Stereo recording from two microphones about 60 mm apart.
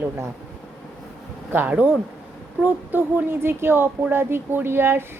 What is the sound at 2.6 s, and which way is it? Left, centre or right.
Speech, right.